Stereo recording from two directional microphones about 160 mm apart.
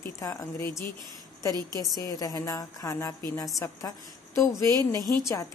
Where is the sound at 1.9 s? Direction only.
20° left (ahead or behind).